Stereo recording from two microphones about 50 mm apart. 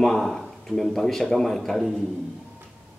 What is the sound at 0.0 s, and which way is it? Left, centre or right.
A man's voice, centre.